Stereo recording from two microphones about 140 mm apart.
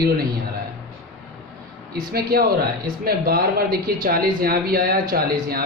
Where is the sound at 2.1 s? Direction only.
90° right.